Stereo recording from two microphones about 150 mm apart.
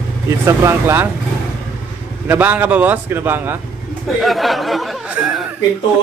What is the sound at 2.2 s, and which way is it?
A man's voice, 10° right (ahead or behind).